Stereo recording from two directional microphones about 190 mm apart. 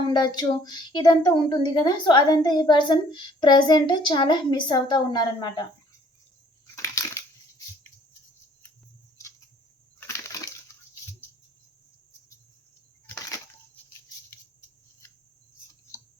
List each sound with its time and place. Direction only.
0.1 s a woman's voice: 20° left (ahead or behind)
6.8 s crushing: 15° left (ahead or behind)
9.2 s a sound: 15° left (ahead or behind)
10.0 s crushing: 15° left (ahead or behind)